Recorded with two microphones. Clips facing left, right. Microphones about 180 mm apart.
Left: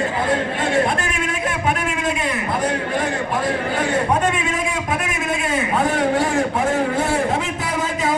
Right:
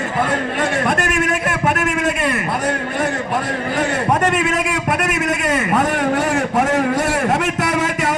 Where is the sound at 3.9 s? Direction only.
75° right (ahead or behind).